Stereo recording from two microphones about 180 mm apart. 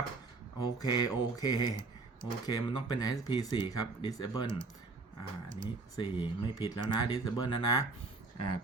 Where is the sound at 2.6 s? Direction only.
25° left (ahead or behind).